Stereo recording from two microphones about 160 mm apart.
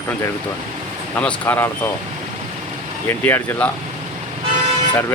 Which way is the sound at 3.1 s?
15° left (ahead or behind).